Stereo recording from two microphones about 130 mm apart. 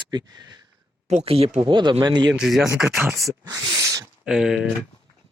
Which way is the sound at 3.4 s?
30° right (ahead or behind).